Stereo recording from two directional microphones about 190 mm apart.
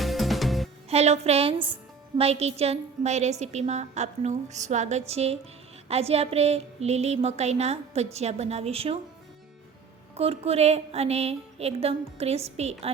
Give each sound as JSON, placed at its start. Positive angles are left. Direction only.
{"t": 0.0, "sound": "music", "side_deg": 0}
{"t": 0.9, "sound": "a woman's voice", "side_deg": -35}
{"t": 10.2, "sound": "a woman's voice", "side_deg": -30}